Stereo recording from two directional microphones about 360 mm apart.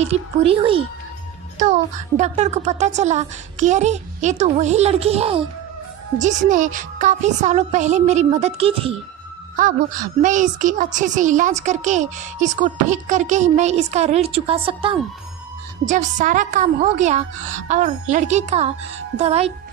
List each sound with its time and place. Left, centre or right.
0.0 s a woman's voice: centre